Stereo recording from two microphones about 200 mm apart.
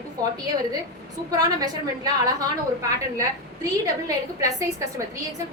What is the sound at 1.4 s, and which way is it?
A woman's voice, 20° right (ahead or behind).